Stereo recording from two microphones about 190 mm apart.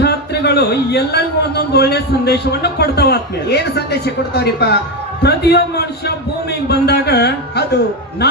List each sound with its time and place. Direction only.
0.0 s a man's voice: 60° left (ahead or behind)